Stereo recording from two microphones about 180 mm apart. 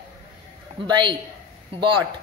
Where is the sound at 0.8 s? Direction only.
25° right (ahead or behind).